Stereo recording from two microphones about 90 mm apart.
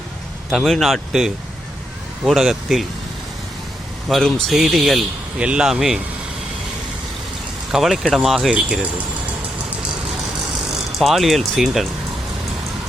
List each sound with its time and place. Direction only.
0.5 s speech: centre (ahead or behind)
4.1 s speech: 5° left (ahead or behind)
7.7 s speech: 5° right (ahead or behind)
10.9 s speech: centre (ahead or behind)